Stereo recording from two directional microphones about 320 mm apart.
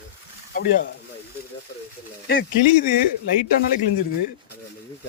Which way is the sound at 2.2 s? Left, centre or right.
Left.